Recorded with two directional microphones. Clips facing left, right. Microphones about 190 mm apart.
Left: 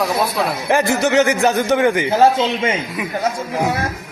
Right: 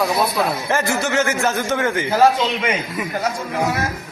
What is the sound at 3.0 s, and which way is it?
Speech, centre (ahead or behind).